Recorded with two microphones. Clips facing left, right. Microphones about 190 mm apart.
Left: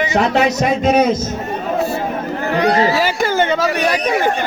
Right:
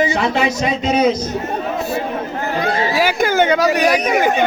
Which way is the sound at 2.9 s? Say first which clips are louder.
Right 1 dB; 10° right (ahead or behind).